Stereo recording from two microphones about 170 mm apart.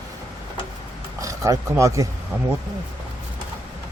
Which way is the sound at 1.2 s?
20° right (ahead or behind).